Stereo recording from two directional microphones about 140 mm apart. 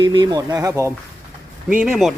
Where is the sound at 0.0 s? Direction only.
30° right (ahead or behind).